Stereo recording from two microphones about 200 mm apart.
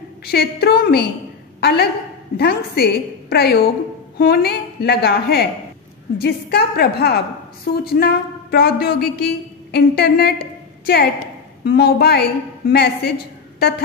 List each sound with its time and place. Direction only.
0.2 s a woman's voice: 55° left (ahead or behind)